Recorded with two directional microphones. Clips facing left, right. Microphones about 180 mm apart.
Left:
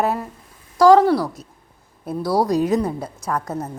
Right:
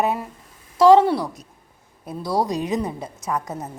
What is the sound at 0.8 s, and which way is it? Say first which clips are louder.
Speech: left 1 dB; 25° right (ahead or behind).